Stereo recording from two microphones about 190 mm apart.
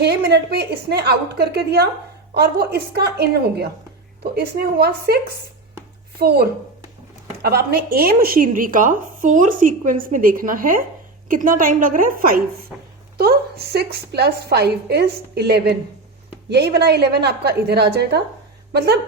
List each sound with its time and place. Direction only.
0.3 s a woman's voice: 55° right (ahead or behind)
12.7 s speech: 5° right (ahead or behind)
13.1 s a woman's voice: 55° right (ahead or behind)